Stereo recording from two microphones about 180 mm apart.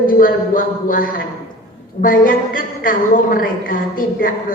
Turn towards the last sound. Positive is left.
turn(degrees=50)  # may be behind; listen again after turning